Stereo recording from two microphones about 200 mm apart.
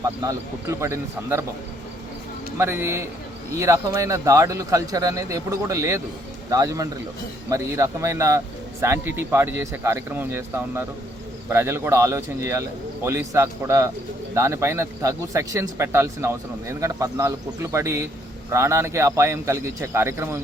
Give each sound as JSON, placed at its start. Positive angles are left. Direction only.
{"t": 0.2, "sound": "speech", "side_deg": -15}
{"t": 2.6, "sound": "speech", "side_deg": -10}